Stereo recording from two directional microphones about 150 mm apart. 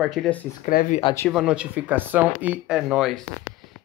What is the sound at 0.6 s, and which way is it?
Speech, 55° left (ahead or behind).